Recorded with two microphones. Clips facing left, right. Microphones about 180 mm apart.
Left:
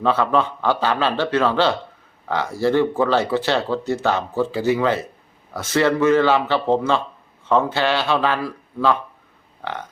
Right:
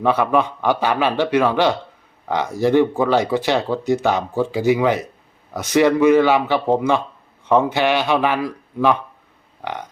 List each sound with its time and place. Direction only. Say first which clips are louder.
0.0 s speech: right 1 dB; 15° right (ahead or behind)
9.6 s burping: right 1 dB; 15° right (ahead or behind)